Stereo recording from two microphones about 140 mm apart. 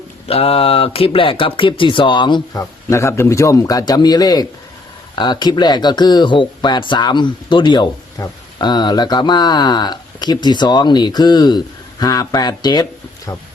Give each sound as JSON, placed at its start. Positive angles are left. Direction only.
{"t": 0.3, "sound": "speech", "side_deg": 45}